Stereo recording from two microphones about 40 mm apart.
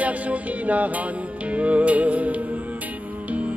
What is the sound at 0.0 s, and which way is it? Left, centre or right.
Music, right.